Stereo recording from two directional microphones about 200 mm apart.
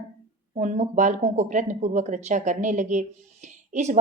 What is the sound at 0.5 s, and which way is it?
A woman's voice, 35° right (ahead or behind).